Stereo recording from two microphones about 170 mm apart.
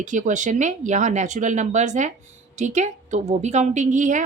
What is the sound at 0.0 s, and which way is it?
Speech, 50° right (ahead or behind).